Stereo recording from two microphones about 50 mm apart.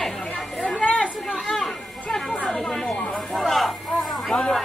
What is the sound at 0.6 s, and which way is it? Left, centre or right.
Chatter, centre.